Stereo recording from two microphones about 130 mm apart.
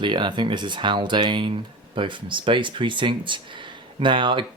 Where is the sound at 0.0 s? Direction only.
35° right (ahead or behind).